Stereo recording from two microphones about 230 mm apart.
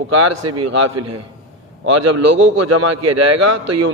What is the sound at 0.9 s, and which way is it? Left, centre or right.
A man's voice, right.